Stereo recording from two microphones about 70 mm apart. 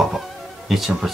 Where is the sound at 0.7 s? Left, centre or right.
Centre.